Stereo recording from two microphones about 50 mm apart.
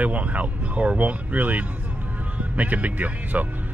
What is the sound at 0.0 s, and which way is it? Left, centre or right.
Speech, right.